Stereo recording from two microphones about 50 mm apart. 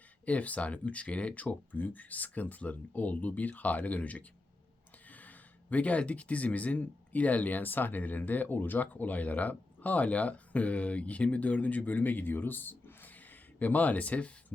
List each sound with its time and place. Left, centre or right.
0.3 s speech: left
5.7 s speech: left